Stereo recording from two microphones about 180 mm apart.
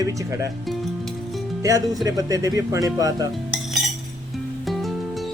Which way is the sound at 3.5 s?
Centre (ahead or behind).